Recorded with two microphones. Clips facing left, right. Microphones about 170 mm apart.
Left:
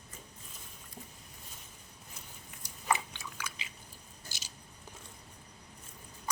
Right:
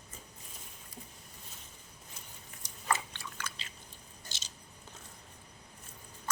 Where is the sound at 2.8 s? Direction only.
15° left (ahead or behind).